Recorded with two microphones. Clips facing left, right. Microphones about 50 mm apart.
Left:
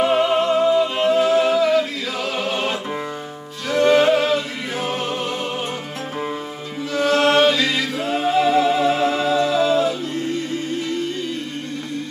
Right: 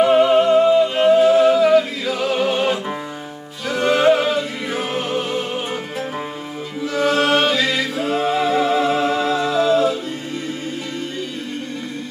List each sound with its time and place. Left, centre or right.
0.0 s music: centre
6.8 s singing: centre